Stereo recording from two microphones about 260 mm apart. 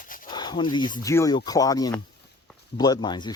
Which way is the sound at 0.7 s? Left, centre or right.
Centre.